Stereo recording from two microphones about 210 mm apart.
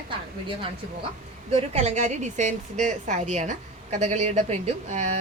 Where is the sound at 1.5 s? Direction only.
30° right (ahead or behind).